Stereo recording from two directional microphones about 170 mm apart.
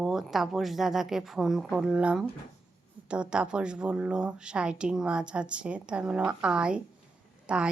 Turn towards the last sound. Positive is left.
turn(degrees=-5)  # may be behind; listen again after turning